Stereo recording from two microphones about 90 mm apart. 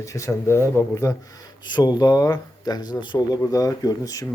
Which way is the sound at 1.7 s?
50° left (ahead or behind).